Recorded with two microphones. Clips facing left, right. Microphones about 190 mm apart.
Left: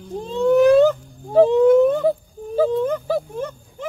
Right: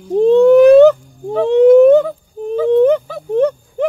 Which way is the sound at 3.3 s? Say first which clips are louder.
Right 14 dB; 70° right (ahead or behind).